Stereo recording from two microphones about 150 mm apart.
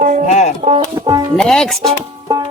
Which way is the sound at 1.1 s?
25° right (ahead or behind).